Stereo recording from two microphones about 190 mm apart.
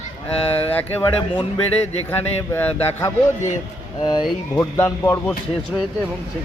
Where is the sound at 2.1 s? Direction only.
10° left (ahead or behind).